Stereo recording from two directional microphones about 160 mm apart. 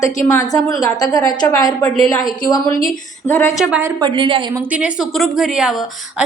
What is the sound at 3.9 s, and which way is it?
Speech, 30° right (ahead or behind).